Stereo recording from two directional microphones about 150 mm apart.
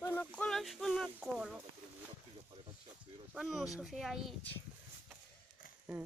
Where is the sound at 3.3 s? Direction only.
Centre (ahead or behind).